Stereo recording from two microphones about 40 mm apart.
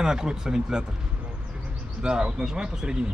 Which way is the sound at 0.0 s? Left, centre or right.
Centre.